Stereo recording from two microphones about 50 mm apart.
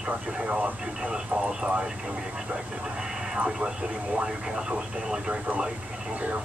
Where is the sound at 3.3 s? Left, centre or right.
Centre.